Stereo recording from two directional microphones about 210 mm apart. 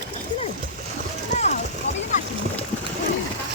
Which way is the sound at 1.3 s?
35° left (ahead or behind).